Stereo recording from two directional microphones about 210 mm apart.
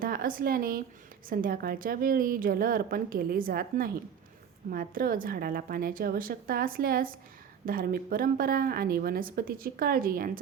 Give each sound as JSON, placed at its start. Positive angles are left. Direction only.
{"t": 0.0, "sound": "a woman's voice", "side_deg": -40}